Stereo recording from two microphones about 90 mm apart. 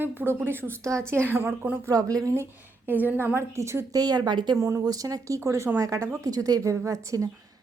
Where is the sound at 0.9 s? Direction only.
35° right (ahead or behind).